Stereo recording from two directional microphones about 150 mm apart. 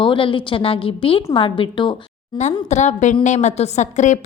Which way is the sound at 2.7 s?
50° left (ahead or behind).